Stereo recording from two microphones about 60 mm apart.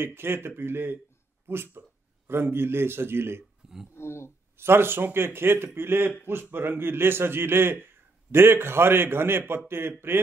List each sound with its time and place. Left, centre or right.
0.0 s a man's voice: right
3.9 s speech: left
4.6 s a man's voice: right